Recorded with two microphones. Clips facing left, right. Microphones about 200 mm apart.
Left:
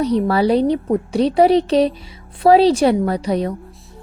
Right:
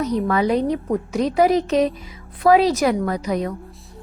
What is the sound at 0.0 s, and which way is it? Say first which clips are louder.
A woman's voice: left 4 dB; 35° left (ahead or behind).